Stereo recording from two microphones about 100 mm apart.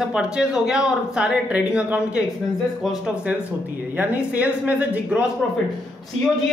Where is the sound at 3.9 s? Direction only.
15° right (ahead or behind).